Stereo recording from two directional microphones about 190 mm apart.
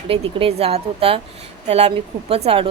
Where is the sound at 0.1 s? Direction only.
30° right (ahead or behind).